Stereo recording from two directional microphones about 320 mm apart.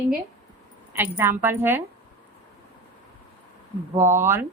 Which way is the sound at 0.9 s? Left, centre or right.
Centre.